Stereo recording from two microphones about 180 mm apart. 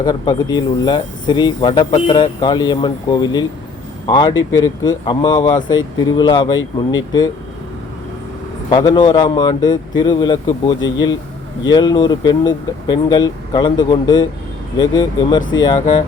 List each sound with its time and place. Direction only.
0.0 s speech: 25° left (ahead or behind)
8.7 s speech: 25° left (ahead or behind)